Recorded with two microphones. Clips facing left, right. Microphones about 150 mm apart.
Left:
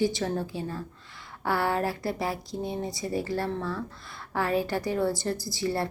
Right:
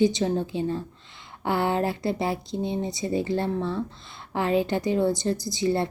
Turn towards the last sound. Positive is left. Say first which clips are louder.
# right 4 dB
turn(degrees=-20)  # may be behind; listen again after turning